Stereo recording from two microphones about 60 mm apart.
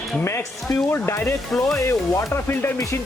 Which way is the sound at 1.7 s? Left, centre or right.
Left.